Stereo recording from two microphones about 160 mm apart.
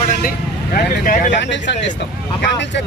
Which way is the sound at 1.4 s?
90° left.